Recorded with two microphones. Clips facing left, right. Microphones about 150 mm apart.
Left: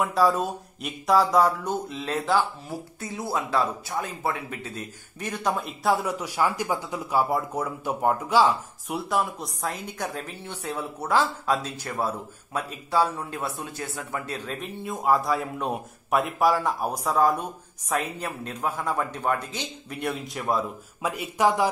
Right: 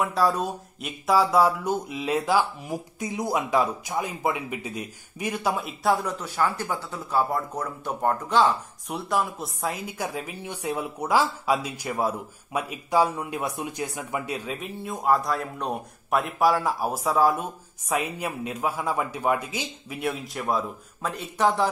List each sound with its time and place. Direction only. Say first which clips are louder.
0.0 s speech: left 1 dB; centre (ahead or behind)
21.1 s a man's voice: left 1 dB; 10° left (ahead or behind)